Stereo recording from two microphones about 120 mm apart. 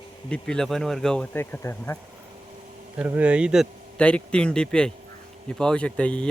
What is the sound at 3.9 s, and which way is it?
Speech, 10° left (ahead or behind).